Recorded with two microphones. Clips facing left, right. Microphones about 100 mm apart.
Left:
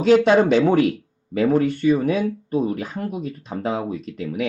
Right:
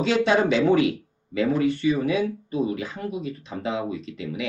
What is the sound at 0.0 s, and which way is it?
Speech, 50° left (ahead or behind).